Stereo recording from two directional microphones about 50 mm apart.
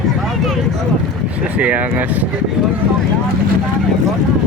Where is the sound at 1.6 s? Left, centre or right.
Right.